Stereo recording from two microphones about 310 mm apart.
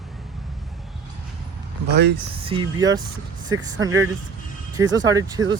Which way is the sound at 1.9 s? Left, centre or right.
Right.